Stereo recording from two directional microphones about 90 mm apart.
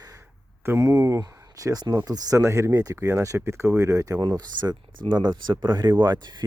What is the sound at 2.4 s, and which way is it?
Speech, 30° right (ahead or behind).